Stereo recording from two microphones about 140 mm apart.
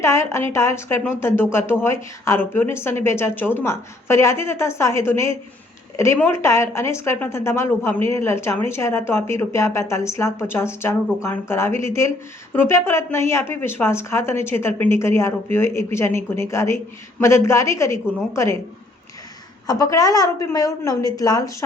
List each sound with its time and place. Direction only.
0.0 s a woman's voice: 20° left (ahead or behind)
19.6 s a woman's voice: 25° left (ahead or behind)